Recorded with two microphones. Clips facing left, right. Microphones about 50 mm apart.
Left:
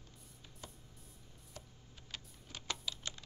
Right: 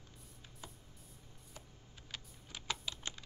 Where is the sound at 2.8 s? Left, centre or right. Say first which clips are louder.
Even; right.